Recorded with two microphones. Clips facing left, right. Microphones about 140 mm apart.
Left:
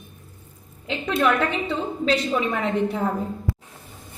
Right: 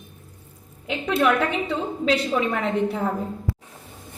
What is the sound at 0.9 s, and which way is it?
A woman's voice, 10° right (ahead or behind).